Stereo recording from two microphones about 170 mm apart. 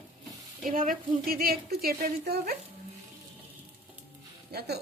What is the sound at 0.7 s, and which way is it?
A woman's voice, 55° right (ahead or behind).